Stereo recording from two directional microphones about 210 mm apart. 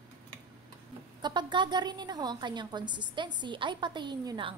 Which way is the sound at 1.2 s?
20° right (ahead or behind).